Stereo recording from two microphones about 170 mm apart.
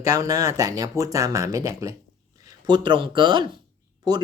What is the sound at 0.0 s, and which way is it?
Speech, 20° right (ahead or behind).